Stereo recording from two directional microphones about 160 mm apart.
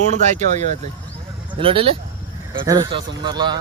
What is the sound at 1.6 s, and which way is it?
Speech, 35° right (ahead or behind).